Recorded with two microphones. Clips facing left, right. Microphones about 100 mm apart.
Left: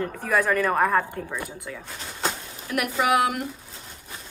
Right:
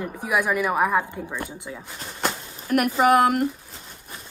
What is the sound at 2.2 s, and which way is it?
Speech, 45° right (ahead or behind).